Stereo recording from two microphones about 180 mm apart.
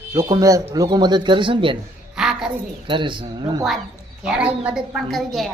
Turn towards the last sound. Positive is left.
turn(degrees=0)  # may be behind; listen again after turning